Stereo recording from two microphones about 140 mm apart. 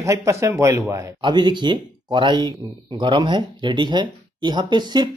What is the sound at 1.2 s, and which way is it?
Speech, 35° right (ahead or behind).